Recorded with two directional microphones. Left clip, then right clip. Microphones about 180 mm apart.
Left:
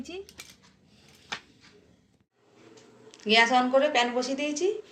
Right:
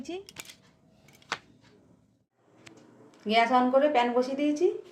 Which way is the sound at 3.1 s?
60° right (ahead or behind).